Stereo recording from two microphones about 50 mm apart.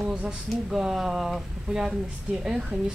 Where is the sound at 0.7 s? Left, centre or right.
Centre.